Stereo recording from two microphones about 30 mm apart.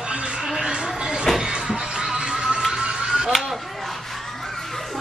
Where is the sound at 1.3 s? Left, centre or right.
Centre.